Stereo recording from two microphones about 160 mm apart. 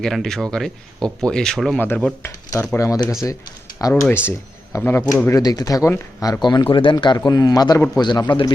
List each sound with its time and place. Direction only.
0.0 s speech: centre (ahead or behind)
2.2 s speech: 15° left (ahead or behind)